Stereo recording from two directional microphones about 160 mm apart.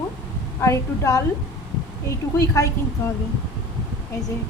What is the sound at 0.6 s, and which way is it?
Speech, 20° left (ahead or behind).